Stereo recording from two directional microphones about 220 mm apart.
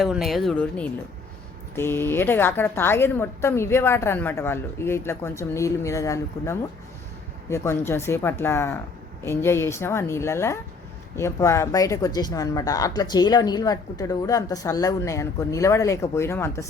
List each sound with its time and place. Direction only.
0.0 s speech: centre (ahead or behind)